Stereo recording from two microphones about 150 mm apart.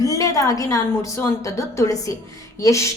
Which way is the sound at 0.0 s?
20° left (ahead or behind).